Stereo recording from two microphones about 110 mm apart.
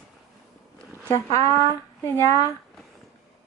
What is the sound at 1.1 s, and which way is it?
Speech, 30° left (ahead or behind).